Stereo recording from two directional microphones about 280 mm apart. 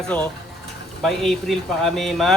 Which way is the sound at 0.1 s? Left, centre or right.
Centre.